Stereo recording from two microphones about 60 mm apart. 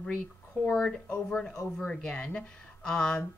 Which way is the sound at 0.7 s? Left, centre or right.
Centre.